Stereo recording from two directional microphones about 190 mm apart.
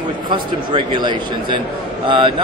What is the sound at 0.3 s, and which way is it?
Speech, 25° right (ahead or behind).